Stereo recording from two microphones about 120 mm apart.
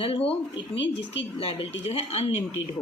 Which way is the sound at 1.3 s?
50° left (ahead or behind).